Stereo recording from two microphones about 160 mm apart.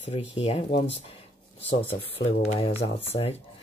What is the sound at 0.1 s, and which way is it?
Speech, 35° left (ahead or behind).